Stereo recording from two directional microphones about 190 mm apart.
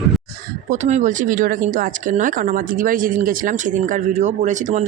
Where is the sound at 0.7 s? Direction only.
40° right (ahead or behind).